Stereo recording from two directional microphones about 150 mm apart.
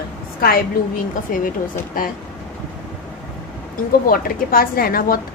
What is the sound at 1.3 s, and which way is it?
Speech, 65° left (ahead or behind).